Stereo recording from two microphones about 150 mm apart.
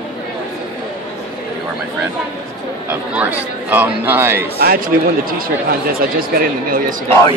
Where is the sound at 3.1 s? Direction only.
10° right (ahead or behind).